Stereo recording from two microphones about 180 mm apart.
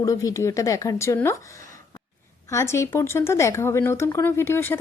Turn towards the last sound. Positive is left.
turn(degrees=10)  # may be behind; listen again after turning